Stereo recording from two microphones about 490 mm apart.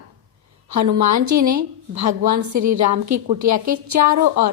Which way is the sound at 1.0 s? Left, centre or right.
Right.